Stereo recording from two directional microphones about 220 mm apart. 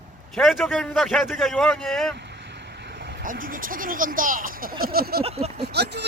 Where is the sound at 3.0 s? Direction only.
40° right (ahead or behind).